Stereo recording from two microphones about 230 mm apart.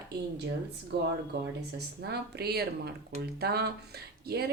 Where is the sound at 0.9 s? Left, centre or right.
Right.